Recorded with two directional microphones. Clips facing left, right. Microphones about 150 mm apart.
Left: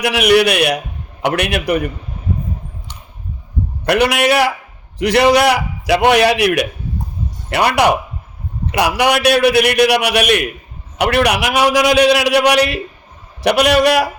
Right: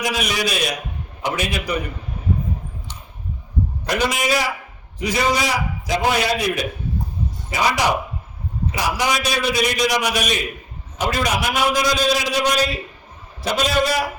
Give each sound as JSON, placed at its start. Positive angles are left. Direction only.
{"t": 0.0, "sound": "a man's voice", "side_deg": 70}
{"t": 3.8, "sound": "a man's voice", "side_deg": 65}
{"t": 7.5, "sound": "a man's voice", "side_deg": 65}